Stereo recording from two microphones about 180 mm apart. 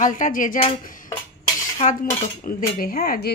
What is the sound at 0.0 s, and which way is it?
Speech, 45° left (ahead or behind).